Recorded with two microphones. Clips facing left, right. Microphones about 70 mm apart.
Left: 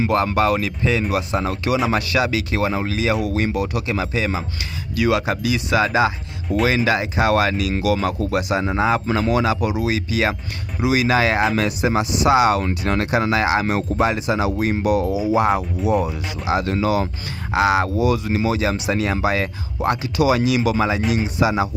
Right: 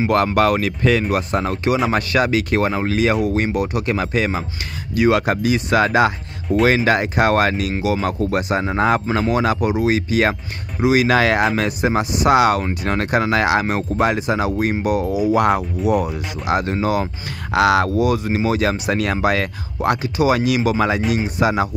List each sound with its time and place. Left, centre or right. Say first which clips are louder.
0.1 s speech: right 3 dB; right
1.1 s speech: right 2 dB; right
4.9 s speech: right 3 dB; right
7.8 s speech: right 1 dB; right
11.6 s speech: right 1 dB; right
12.4 s speech: right 1 dB; right
12.8 s speech: right 2 dB; right
15.1 s speech: right 2 dB; right
16.6 s speech: even; right
17.5 s speech: right 2 dB; right
17.8 s speech: right 1 dB; right
18.6 s speech: right 2 dB; right